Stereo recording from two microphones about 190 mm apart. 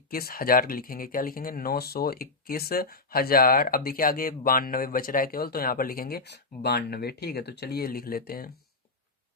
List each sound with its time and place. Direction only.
0.1 s speech: 50° left (ahead or behind)